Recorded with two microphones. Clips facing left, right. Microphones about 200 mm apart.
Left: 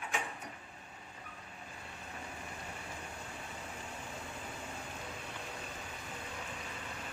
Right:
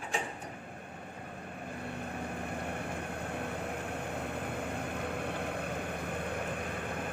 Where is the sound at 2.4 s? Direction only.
60° right (ahead or behind).